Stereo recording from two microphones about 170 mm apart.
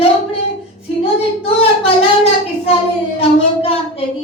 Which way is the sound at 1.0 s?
35° left (ahead or behind).